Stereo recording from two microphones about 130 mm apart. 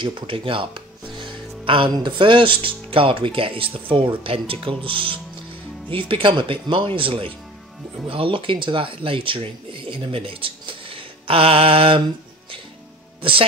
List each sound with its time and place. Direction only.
0.0 s speech: 40° right (ahead or behind)
13.2 s speech: 45° right (ahead or behind)